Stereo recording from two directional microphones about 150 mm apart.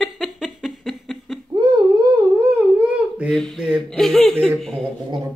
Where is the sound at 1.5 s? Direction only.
30° right (ahead or behind).